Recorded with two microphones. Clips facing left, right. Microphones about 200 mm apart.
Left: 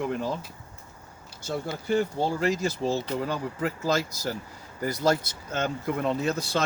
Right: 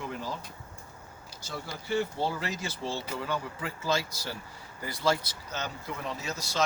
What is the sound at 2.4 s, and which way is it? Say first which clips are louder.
Speech: left 9 dB; 45° left (ahead or behind).